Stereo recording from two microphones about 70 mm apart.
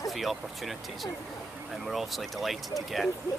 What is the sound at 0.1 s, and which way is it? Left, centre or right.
Speech, centre.